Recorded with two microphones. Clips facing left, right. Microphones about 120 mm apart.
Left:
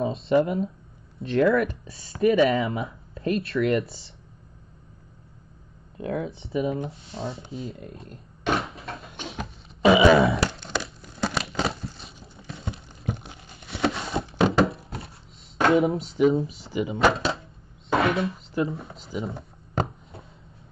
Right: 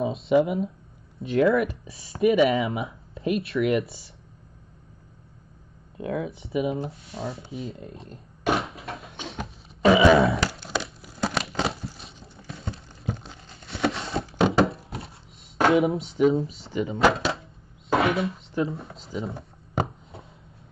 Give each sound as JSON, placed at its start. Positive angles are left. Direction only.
{"t": 0.0, "sound": "speech", "side_deg": -5}
{"t": 6.1, "sound": "speech", "side_deg": 25}
{"t": 6.5, "sound": "speech", "side_deg": -5}
{"t": 6.9, "sound": "speech", "side_deg": 25}
{"t": 8.5, "sound": "a sound", "side_deg": 0}
{"t": 9.8, "sound": "crushing", "side_deg": 10}
{"t": 12.4, "sound": "clip-clop", "side_deg": 0}
{"t": 13.1, "sound": "a sound", "side_deg": 15}
{"t": 13.6, "sound": "a sound", "side_deg": 0}
{"t": 15.7, "sound": "speech", "side_deg": 0}